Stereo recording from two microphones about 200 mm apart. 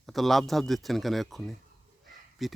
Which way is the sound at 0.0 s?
Centre (ahead or behind).